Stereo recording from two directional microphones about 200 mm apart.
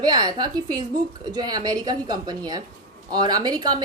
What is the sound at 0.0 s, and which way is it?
Speech, 20° right (ahead or behind).